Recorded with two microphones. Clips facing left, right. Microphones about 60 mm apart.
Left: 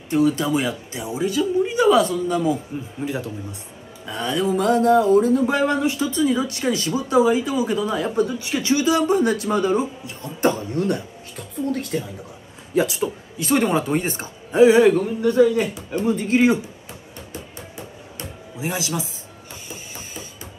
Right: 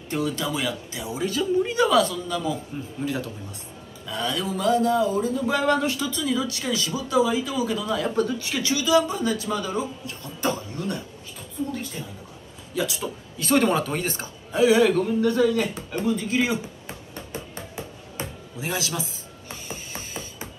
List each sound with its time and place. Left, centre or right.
0.1 s speech: left
11.3 s speech: left
12.7 s a man's voice: left
18.6 s speech: centre